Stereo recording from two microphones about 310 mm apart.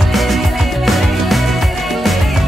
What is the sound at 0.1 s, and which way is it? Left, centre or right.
Music, centre.